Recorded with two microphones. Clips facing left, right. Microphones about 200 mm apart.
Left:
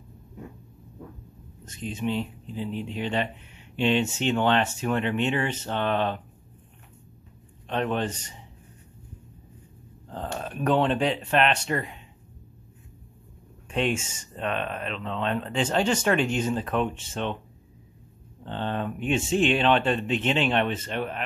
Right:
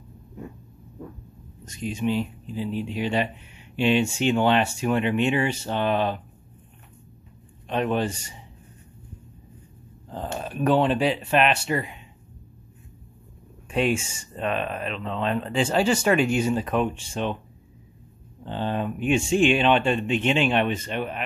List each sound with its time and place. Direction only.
1.7 s speech: 10° right (ahead or behind)
7.6 s speech: 10° right (ahead or behind)
10.0 s speech: 5° right (ahead or behind)
13.7 s speech: 10° right (ahead or behind)
18.4 s speech: 10° right (ahead or behind)